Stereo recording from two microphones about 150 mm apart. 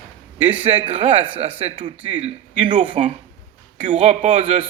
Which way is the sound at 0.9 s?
35° right (ahead or behind).